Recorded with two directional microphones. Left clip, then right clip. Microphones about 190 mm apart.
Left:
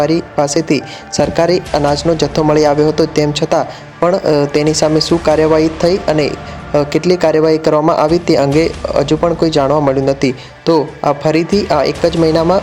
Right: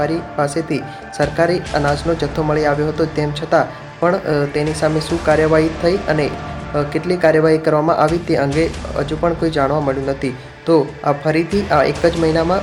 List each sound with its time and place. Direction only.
0.0 s speech: 35° left (ahead or behind)